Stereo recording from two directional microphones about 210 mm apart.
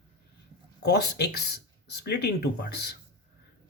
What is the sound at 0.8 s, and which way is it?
Speech, 50° left (ahead or behind).